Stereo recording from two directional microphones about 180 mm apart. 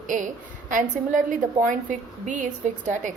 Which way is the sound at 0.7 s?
45° right (ahead or behind).